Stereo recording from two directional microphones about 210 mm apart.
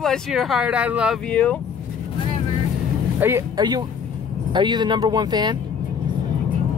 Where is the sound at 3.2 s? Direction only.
15° right (ahead or behind).